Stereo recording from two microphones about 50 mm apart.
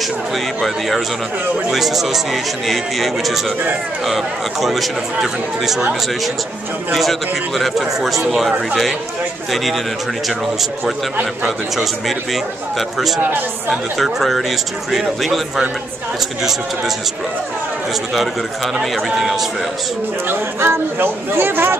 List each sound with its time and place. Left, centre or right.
0.6 s speech: centre
6.9 s speech: centre
11.4 s speech: centre
18.8 s speech: centre
20.2 s speech: right